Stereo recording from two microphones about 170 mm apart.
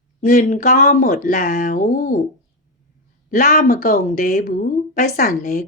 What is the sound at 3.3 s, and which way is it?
Speech, 50° left (ahead or behind).